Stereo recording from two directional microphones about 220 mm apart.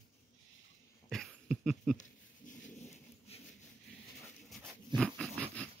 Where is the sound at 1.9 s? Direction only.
35° left (ahead or behind).